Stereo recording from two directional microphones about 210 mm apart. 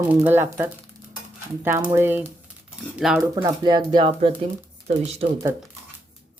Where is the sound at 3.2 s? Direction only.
15° right (ahead or behind).